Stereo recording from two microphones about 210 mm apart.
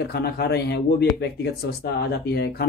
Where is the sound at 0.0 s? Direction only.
50° left (ahead or behind).